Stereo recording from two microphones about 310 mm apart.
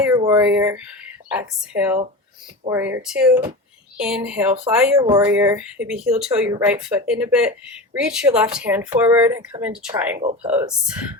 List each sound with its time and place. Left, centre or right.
0.0 s speech: centre